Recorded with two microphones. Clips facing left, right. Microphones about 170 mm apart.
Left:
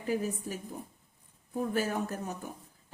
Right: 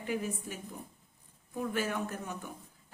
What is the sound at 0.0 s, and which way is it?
A woman's voice, 35° left (ahead or behind).